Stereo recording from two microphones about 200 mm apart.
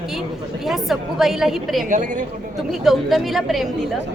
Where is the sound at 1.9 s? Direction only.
40° right (ahead or behind).